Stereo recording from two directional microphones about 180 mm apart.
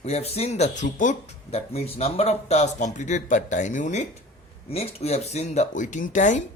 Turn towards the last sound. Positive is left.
turn(degrees=45)  # may be behind; listen again after turning